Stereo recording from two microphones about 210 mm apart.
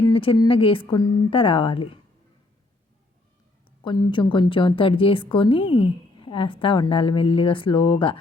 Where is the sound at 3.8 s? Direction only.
20° left (ahead or behind).